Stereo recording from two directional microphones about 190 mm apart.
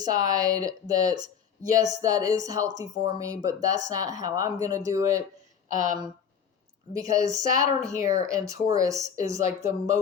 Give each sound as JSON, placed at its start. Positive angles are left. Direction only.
{"t": 0.0, "sound": "speech", "side_deg": -20}
{"t": 5.6, "sound": "speech", "side_deg": -40}
{"t": 6.9, "sound": "speech", "side_deg": -20}